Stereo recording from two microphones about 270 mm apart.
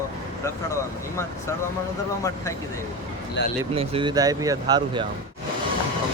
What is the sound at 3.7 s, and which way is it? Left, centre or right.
Speech, centre.